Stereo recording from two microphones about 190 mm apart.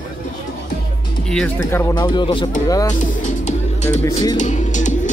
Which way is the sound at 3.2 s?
40° left (ahead or behind).